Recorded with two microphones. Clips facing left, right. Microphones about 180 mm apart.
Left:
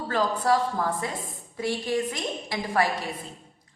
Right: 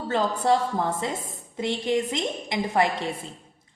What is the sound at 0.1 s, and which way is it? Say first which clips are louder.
A woman's voice: right 1 dB; 25° right (ahead or behind).